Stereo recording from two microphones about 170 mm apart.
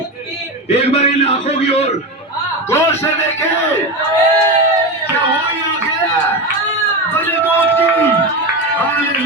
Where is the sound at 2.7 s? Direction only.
15° left (ahead or behind).